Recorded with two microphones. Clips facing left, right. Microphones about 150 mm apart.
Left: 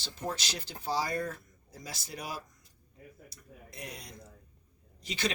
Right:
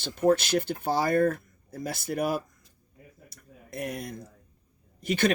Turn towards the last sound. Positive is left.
turn(degrees=-55)  # may be behind; listen again after turning